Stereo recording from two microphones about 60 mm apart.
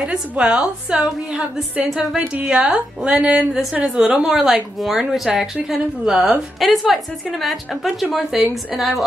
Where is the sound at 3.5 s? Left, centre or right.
Centre.